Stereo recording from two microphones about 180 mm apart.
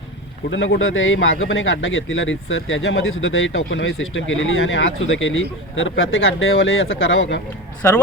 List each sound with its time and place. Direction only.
0.5 s a man's voice: 90° left
7.8 s speech: 10° left (ahead or behind)